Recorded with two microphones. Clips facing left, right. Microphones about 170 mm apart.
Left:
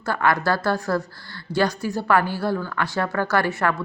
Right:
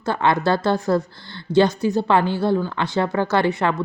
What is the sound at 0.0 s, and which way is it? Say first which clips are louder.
A woman's voice: right 2 dB; 25° right (ahead or behind).